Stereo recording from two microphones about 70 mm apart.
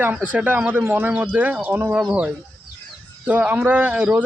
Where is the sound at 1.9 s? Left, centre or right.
Centre.